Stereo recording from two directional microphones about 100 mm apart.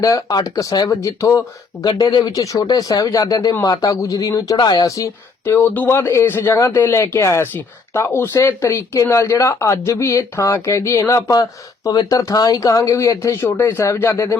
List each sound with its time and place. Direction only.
0.0 s speech: 40° left (ahead or behind)
1.8 s speech: 45° left (ahead or behind)
5.5 s a man's voice: 15° left (ahead or behind)